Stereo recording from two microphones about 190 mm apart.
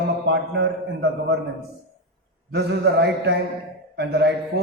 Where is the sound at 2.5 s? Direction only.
60° right (ahead or behind).